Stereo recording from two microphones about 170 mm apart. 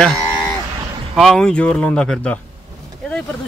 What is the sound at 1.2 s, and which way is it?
Speech, centre (ahead or behind).